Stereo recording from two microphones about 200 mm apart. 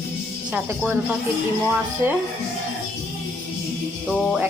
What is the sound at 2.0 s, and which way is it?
Speech, 10° right (ahead or behind).